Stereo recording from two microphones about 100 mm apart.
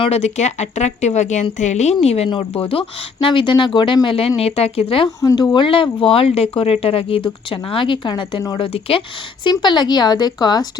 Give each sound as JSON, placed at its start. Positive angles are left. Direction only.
{"t": 0.0, "sound": "a woman's voice", "side_deg": 90}
{"t": 5.2, "sound": "speech", "side_deg": 40}
{"t": 6.5, "sound": "speech", "side_deg": 70}
{"t": 8.5, "sound": "speech", "side_deg": 65}
{"t": 9.4, "sound": "speech", "side_deg": 50}